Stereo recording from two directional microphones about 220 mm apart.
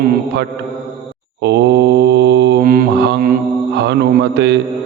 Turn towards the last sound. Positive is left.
turn(degrees=-50)  # may be behind; listen again after turning